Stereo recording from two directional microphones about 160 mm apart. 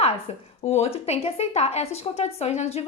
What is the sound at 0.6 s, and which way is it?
A woman's voice, 40° left (ahead or behind).